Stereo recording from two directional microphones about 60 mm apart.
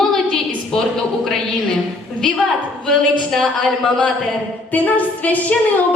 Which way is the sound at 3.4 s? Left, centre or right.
Left.